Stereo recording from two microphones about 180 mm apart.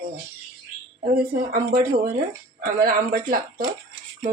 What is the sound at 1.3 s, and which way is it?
A woman's voice, 50° right (ahead or behind).